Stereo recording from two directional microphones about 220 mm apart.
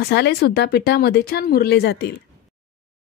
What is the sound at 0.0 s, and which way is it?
A woman's voice, 50° left (ahead or behind).